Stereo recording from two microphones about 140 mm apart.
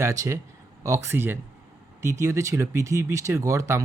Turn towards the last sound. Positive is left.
turn(degrees=-20)  # may be behind; listen again after turning